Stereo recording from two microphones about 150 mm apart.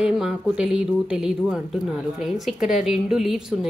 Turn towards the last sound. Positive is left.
turn(degrees=0)  # may be behind; listen again after turning